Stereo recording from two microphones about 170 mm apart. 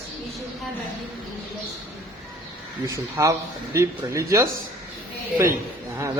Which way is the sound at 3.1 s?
15° right (ahead or behind).